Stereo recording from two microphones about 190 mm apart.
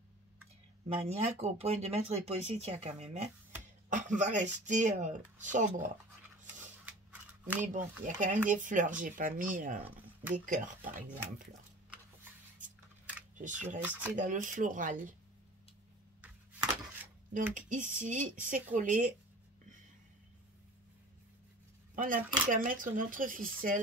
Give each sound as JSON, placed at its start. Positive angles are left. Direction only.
{"t": 1.0, "sound": "speech", "side_deg": -35}
{"t": 6.4, "sound": "scissors", "side_deg": -5}
{"t": 8.0, "sound": "speech", "side_deg": -45}
{"t": 13.4, "sound": "speech", "side_deg": -40}
{"t": 13.8, "sound": "speech", "side_deg": -10}
{"t": 14.1, "sound": "speech", "side_deg": -40}
{"t": 16.2, "sound": "a sound", "side_deg": -10}
{"t": 17.6, "sound": "speech", "side_deg": -40}
{"t": 21.9, "sound": "speech", "side_deg": -45}